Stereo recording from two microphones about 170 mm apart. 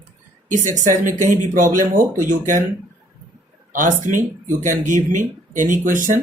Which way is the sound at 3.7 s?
50° right (ahead or behind).